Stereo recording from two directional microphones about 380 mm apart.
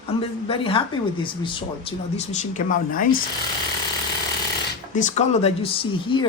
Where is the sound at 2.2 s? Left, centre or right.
Centre.